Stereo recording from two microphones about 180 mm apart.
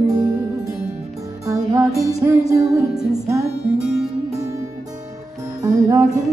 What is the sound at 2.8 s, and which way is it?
Music, 5° right (ahead or behind).